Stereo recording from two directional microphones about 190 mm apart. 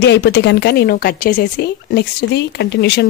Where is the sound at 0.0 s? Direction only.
60° left (ahead or behind).